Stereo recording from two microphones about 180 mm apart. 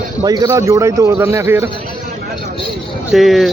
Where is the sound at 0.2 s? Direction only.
20° right (ahead or behind).